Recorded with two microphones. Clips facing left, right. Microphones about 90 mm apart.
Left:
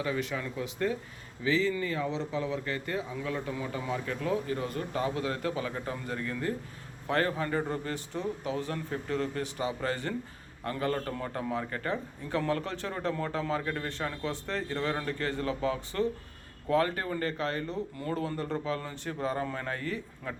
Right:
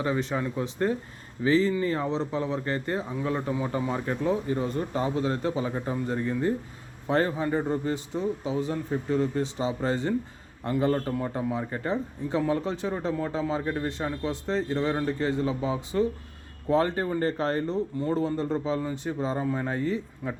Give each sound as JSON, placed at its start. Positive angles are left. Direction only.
{"t": 0.0, "sound": "speech", "side_deg": -30}
{"t": 4.2, "sound": "a man's voice", "side_deg": -25}